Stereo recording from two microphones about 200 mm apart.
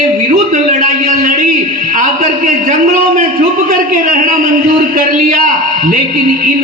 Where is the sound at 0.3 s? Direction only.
40° right (ahead or behind).